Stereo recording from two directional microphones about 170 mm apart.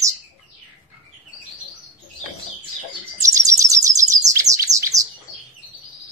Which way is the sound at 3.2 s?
20° right (ahead or behind).